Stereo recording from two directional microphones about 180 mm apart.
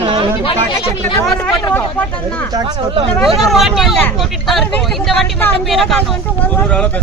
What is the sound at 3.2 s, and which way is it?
Speech, centre (ahead or behind).